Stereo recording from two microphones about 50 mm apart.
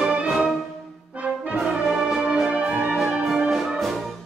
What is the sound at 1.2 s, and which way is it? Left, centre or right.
Brass instrument, right.